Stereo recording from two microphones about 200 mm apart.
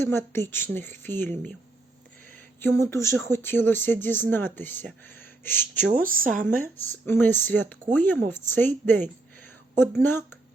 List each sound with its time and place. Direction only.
0.0 s speech: 10° left (ahead or behind)
2.6 s speech: 15° left (ahead or behind)
5.9 s speech: 40° right (ahead or behind)
6.6 s speech: 10° left (ahead or behind)